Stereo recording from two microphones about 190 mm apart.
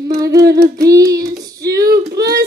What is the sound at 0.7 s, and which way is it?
Child singing, 20° right (ahead or behind).